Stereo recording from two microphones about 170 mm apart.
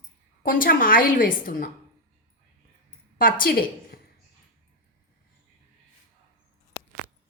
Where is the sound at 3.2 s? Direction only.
60° left (ahead or behind).